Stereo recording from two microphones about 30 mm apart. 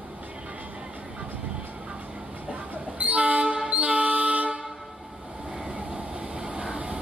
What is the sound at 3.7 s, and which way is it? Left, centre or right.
Vehicle, right.